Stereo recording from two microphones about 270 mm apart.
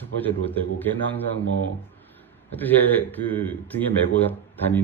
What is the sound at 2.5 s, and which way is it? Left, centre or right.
A man's voice, centre.